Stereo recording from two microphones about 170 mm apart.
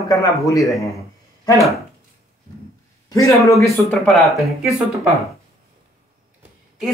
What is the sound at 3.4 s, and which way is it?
Speech, 15° left (ahead or behind).